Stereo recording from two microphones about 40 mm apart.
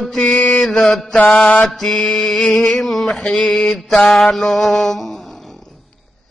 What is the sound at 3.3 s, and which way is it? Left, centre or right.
Mantra, left.